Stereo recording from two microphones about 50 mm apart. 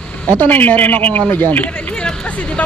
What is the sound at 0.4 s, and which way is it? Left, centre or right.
A man's voice, left.